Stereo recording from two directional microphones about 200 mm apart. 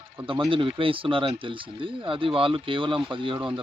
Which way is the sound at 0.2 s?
30° right (ahead or behind).